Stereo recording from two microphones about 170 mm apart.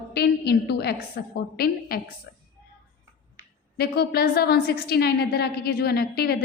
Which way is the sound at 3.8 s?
65° left (ahead or behind).